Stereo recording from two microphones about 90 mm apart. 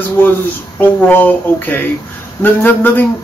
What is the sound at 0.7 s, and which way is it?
A man's voice, 20° left (ahead or behind).